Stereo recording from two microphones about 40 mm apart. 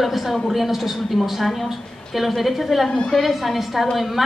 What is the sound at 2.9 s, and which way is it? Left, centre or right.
Speech, centre.